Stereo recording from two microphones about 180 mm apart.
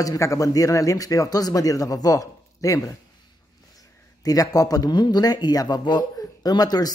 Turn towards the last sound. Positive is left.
turn(degrees=20)  # may be behind; listen again after turning